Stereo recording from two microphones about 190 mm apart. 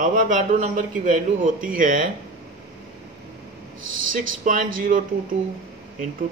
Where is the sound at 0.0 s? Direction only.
40° right (ahead or behind).